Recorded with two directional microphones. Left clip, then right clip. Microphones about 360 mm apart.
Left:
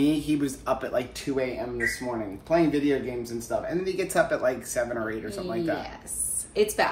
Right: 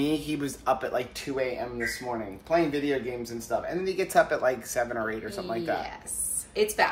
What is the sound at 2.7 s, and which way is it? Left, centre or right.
A woman's voice, centre.